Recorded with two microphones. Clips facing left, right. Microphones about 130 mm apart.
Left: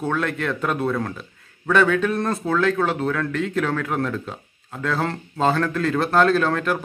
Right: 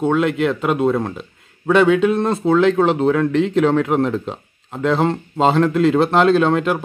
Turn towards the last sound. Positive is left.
turn(degrees=-25)  # may be behind; listen again after turning